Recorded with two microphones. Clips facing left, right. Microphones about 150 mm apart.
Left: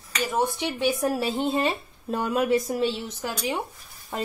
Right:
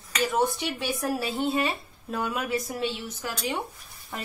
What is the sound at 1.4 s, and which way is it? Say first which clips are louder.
Speech: left 2 dB; 30° left (ahead or behind).